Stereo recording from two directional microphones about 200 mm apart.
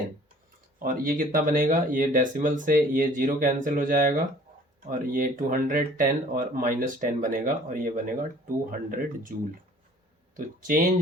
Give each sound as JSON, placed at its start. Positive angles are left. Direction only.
{"t": 0.8, "sound": "speech", "side_deg": -45}
{"t": 10.3, "sound": "speech", "side_deg": -45}